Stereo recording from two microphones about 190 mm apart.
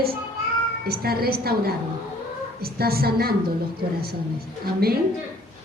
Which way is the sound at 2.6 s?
55° right (ahead or behind).